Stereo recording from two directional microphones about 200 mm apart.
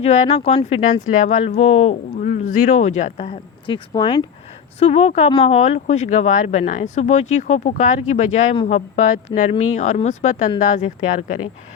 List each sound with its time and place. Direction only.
0.0 s speech: 35° left (ahead or behind)